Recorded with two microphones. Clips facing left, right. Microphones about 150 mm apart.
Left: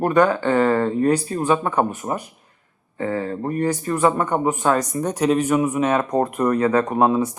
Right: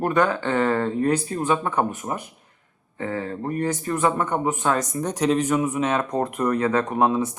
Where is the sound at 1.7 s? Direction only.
40° left (ahead or behind).